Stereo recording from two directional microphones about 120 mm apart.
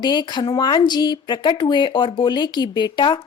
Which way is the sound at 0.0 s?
40° left (ahead or behind).